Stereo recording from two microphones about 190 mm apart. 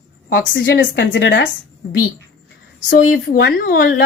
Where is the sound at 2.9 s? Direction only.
55° left (ahead or behind).